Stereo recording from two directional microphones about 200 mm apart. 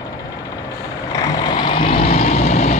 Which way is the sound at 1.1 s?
15° left (ahead or behind).